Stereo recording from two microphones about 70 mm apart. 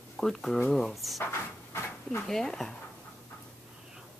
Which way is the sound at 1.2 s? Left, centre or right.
Left.